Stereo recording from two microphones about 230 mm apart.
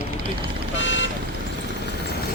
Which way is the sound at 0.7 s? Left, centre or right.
Left.